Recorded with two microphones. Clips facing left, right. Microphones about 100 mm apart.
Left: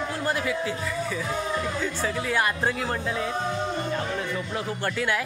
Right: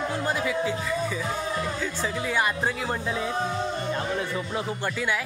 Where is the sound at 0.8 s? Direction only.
5° right (ahead or behind).